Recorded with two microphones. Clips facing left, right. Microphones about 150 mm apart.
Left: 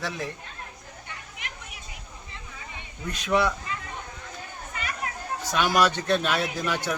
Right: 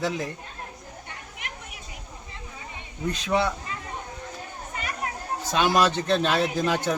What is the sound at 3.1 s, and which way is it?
Speech, 30° right (ahead or behind).